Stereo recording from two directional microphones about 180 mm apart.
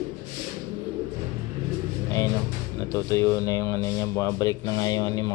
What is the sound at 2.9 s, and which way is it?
Speech, 15° left (ahead or behind).